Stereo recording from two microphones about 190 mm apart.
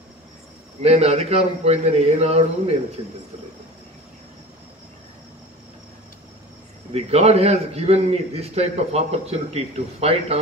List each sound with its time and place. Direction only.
0.8 s a man's voice: 35° right (ahead or behind)
6.9 s a man's voice: 35° right (ahead or behind)